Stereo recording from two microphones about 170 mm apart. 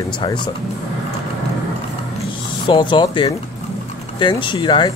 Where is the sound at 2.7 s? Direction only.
30° left (ahead or behind).